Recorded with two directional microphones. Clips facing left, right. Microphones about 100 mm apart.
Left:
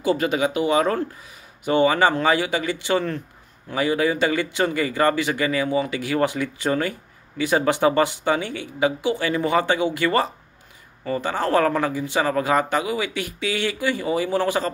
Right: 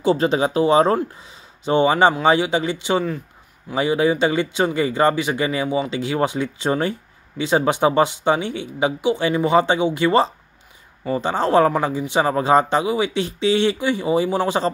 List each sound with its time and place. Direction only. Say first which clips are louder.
0.0 s speech: right 3 dB; 25° right (ahead or behind)